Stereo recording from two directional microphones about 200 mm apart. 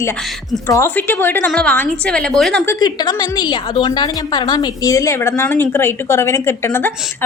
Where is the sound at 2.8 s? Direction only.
20° left (ahead or behind).